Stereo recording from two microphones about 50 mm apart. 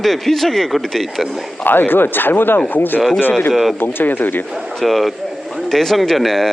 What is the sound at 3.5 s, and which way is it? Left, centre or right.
Speech, centre.